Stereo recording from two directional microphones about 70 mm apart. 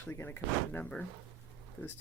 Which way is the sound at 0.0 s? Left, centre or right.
Left.